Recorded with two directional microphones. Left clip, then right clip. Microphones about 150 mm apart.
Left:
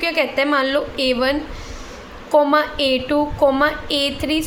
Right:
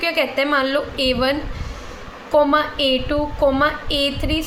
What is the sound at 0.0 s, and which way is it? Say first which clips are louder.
A woman's voice: left 1 dB; 15° left (ahead or behind).